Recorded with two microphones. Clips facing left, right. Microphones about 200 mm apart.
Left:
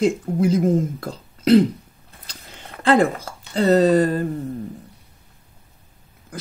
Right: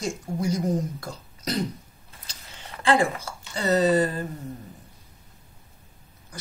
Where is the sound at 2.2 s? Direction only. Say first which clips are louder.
Left 4 dB; 55° left (ahead or behind).